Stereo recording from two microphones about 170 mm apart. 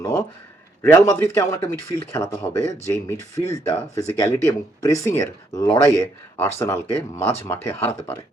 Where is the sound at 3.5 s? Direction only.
20° left (ahead or behind).